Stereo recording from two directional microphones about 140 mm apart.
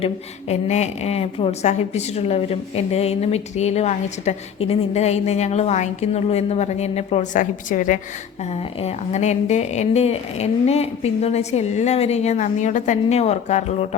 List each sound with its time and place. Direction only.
0.0 s a woman's voice: 50° left (ahead or behind); by 7.9 s 65° left (ahead or behind)
8.8 s a woman's voice: 50° left (ahead or behind)